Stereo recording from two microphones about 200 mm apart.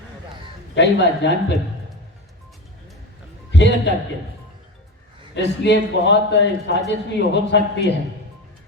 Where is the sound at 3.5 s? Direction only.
60° left (ahead or behind).